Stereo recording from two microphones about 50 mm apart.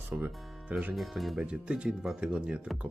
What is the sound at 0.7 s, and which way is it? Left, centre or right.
Speech, right.